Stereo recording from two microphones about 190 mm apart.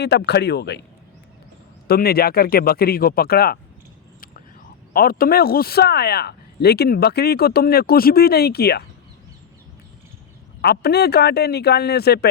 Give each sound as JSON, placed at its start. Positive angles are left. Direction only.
{"t": 0.0, "sound": "speech", "side_deg": 60}
{"t": 1.9, "sound": "speech", "side_deg": 55}
{"t": 4.9, "sound": "speech", "side_deg": 50}
{"t": 10.6, "sound": "speech", "side_deg": 60}